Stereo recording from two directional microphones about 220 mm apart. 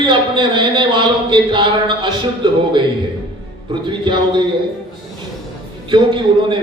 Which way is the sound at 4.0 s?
20° right (ahead or behind).